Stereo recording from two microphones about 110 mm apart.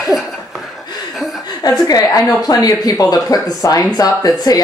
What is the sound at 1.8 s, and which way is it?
Speech, 35° left (ahead or behind).